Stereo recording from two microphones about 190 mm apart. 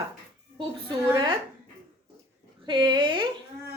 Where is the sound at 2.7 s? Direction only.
25° right (ahead or behind).